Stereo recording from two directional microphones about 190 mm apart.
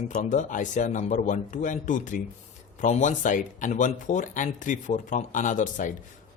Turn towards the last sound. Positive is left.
turn(degrees=40)  # may be behind; listen again after turning